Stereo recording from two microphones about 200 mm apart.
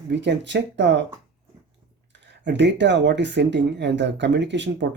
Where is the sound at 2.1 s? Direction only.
60° right (ahead or behind).